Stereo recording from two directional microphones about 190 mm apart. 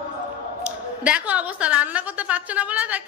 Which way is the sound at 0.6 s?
5° right (ahead or behind).